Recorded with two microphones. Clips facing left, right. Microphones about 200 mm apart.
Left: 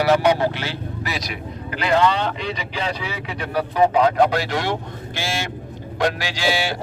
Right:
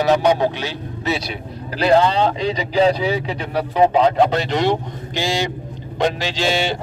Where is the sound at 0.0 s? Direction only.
15° right (ahead or behind).